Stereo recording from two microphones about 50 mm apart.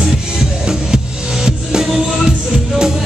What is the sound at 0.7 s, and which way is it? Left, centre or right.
Music, centre.